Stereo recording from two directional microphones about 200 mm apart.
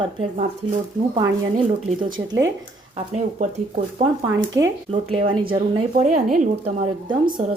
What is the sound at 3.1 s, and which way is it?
Speech, 35° right (ahead or behind).